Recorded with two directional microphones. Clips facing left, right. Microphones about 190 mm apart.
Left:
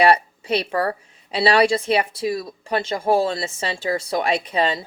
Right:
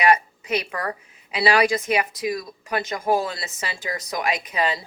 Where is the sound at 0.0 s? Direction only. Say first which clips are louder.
Left 3 dB; 30° left (ahead or behind).